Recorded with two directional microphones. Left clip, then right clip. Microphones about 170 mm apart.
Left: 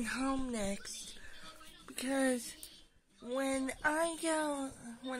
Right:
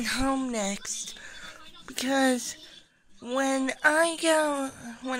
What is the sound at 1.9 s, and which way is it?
Speech, 30° right (ahead or behind).